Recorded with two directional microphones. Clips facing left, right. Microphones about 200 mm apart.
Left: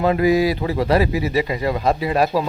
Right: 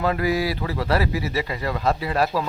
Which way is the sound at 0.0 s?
20° left (ahead or behind).